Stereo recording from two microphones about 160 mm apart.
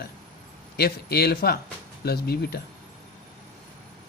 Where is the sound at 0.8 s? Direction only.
80° left.